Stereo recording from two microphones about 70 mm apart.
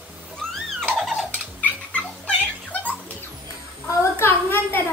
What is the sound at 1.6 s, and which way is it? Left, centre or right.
Cat, left.